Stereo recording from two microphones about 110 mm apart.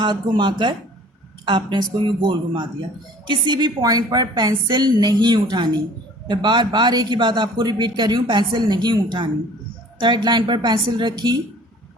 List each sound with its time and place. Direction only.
0.0 s a man's voice: 45° right (ahead or behind)